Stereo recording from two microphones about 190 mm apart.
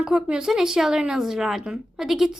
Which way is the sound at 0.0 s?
5° right (ahead or behind).